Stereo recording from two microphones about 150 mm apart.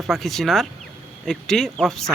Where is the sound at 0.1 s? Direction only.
Centre (ahead or behind).